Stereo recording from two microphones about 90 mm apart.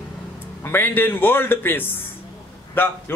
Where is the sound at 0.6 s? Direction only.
25° left (ahead or behind).